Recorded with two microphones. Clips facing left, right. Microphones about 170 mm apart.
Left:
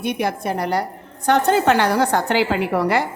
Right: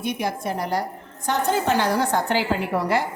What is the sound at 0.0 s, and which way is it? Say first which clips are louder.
A woman's voice: left 4 dB; 65° left (ahead or behind).